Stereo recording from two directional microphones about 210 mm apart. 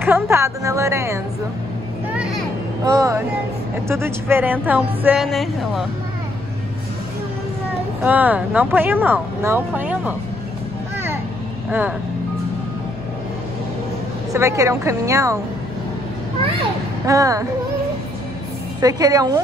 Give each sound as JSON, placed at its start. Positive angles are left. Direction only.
{"t": 0.0, "sound": "speech", "side_deg": -10}
{"t": 2.8, "sound": "a woman's voice", "side_deg": -15}
{"t": 8.0, "sound": "speech", "side_deg": -10}
{"t": 14.3, "sound": "speech", "side_deg": -15}
{"t": 17.0, "sound": "speech", "side_deg": -15}
{"t": 18.8, "sound": "speech", "side_deg": -15}